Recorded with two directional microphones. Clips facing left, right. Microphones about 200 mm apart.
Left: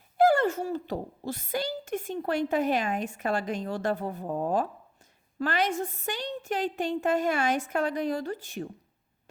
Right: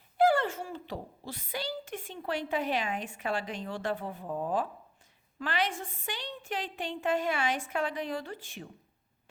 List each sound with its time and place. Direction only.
0.2 s a woman's voice: 45° left (ahead or behind)